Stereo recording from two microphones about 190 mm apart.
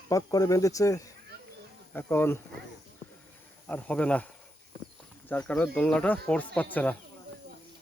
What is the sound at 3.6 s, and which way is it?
Speech, 10° left (ahead or behind).